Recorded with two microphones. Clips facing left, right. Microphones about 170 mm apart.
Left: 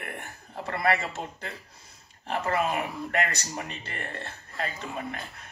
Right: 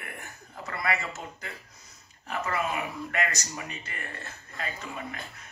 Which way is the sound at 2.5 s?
50° left (ahead or behind).